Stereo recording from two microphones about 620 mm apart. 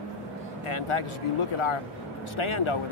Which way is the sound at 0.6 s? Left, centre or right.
Left.